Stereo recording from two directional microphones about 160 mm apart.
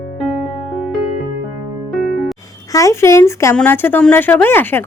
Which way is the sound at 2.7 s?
20° left (ahead or behind).